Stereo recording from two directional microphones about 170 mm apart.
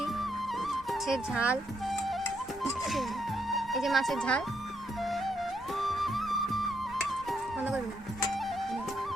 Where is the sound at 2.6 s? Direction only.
Centre (ahead or behind).